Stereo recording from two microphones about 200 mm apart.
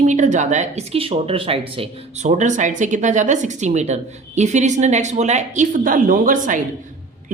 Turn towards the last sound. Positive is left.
turn(degrees=-40)  # may be behind; listen again after turning